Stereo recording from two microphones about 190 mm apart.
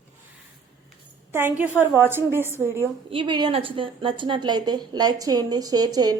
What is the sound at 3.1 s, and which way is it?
A woman's voice, 25° right (ahead or behind).